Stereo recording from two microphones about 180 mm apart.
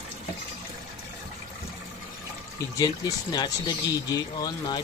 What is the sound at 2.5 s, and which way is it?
Speech, 20° left (ahead or behind).